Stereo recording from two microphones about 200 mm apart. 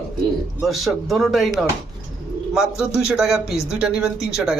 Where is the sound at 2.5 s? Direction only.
Centre (ahead or behind).